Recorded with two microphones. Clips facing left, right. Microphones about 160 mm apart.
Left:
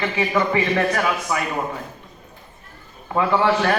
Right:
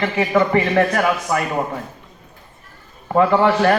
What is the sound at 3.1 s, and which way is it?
Speech, 45° right (ahead or behind).